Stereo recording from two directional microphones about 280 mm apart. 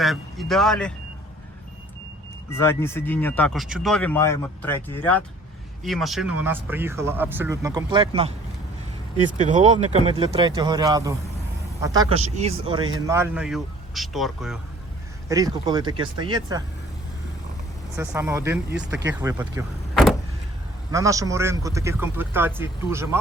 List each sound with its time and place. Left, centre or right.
0.0 s speech: centre
2.5 s a man's voice: centre
9.4 s a man's voice: right; by 14.6 s centre
15.3 s a man's voice: centre
17.9 s a man's voice: centre
19.9 s vehicle: centre
20.9 s a man's voice: centre